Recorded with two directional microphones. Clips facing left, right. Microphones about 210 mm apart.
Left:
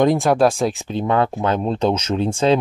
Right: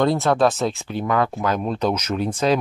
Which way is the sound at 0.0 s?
15° left (ahead or behind).